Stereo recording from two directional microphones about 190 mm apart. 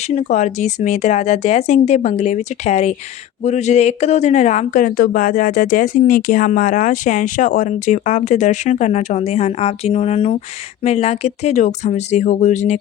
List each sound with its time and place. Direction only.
0.2 s speech: 40° left (ahead or behind)